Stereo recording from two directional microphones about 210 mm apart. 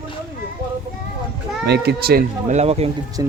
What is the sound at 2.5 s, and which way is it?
Speech, 30° right (ahead or behind).